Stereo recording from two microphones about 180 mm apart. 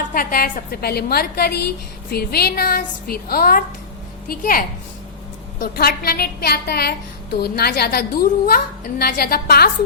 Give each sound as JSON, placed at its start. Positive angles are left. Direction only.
{"t": 0.1, "sound": "a woman's voice", "side_deg": 55}